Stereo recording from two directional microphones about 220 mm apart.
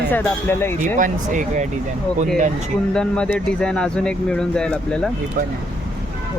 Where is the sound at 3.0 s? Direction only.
5° left (ahead or behind).